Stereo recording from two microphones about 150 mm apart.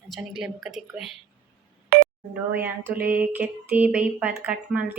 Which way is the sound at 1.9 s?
90° right.